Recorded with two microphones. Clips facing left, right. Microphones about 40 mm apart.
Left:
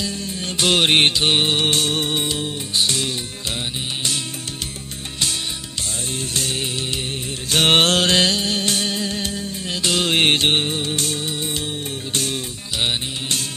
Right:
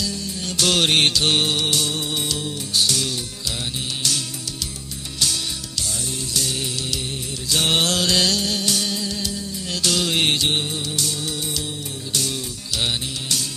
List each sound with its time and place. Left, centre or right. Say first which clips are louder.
0.0 s music: left 1 dB; left
1.5 s music: left 3 dB; left
2.2 s music: left 2 dB; left
6.1 s music: left 2 dB; left
7.5 s music: left 5 dB; left
9.6 s music: left 2 dB; left
12.7 s music: left 2 dB; left